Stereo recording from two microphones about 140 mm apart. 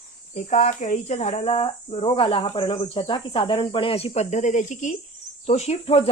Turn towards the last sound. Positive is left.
turn(degrees=45)  # may be behind; listen again after turning